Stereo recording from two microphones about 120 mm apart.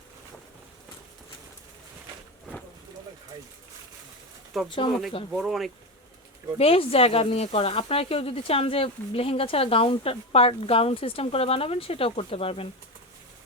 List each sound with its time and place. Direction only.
4.5 s speech: centre (ahead or behind)
6.6 s speech: 55° left (ahead or behind)